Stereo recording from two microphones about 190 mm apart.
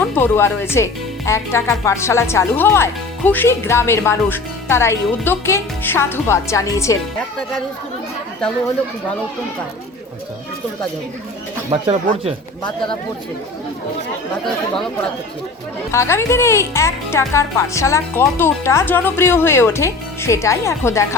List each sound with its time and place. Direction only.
0.0 s speech: 10° left (ahead or behind)
11.7 s speech: 30° right (ahead or behind)
15.9 s speech: 15° left (ahead or behind)